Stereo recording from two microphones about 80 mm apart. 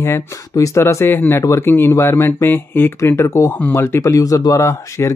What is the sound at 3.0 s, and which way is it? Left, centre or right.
Speech, left.